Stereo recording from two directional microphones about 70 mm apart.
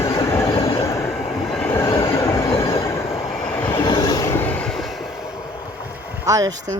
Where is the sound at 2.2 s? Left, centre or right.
Left.